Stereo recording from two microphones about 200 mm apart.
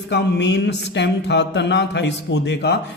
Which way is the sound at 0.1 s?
60° left (ahead or behind).